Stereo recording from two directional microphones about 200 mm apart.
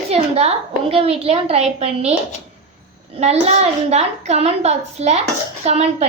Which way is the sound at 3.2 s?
30° right (ahead or behind).